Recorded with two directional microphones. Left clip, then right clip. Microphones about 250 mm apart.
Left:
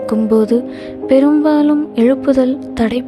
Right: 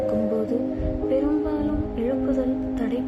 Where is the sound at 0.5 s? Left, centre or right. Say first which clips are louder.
Left 10 dB; left.